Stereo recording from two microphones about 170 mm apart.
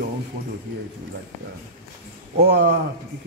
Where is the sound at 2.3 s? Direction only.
75° right (ahead or behind).